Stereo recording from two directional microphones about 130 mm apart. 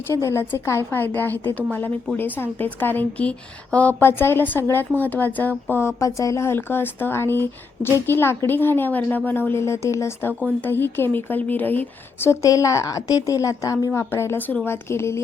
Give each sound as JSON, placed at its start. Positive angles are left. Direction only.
{"t": 0.1, "sound": "a woman's voice", "side_deg": 20}